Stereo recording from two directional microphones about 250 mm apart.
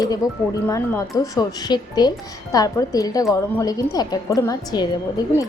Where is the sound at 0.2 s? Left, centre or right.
Centre.